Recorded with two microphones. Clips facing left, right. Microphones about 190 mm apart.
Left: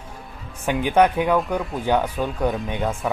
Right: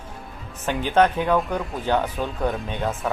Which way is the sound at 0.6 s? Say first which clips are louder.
Left 2 dB; 15° left (ahead or behind).